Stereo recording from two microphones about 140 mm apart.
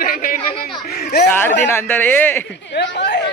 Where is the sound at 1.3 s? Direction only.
15° left (ahead or behind).